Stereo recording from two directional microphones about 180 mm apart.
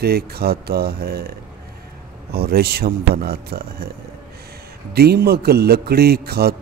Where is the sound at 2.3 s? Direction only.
60° right (ahead or behind).